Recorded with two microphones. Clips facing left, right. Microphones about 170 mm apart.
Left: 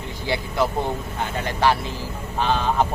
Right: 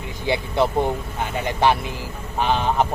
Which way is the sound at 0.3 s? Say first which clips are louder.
Right 3 dB; 25° right (ahead or behind).